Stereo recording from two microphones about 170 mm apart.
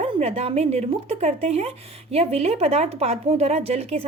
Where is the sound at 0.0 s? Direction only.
35° right (ahead or behind).